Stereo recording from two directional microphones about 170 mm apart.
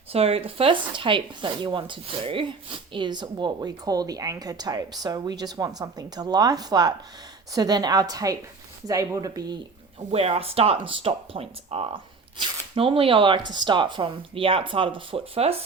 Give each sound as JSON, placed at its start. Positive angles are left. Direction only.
{"t": 0.1, "sound": "speech", "side_deg": -35}
{"t": 10.1, "sound": "speech", "side_deg": -35}